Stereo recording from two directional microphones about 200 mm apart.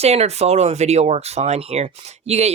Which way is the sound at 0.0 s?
30° right (ahead or behind).